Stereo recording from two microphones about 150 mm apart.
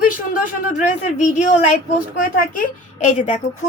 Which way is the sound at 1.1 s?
55° left (ahead or behind).